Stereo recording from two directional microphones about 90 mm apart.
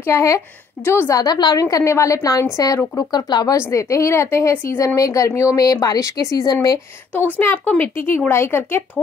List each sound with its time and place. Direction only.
0.0 s speech: 35° left (ahead or behind)
1.1 s speech: 50° left (ahead or behind)
3.5 s speech: 35° left (ahead or behind)
7.3 s speech: 20° left (ahead or behind)